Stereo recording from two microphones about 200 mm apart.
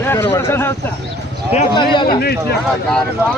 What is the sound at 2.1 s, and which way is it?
Speech, 50° left (ahead or behind).